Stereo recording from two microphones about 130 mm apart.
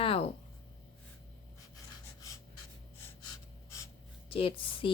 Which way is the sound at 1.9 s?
25° left (ahead or behind).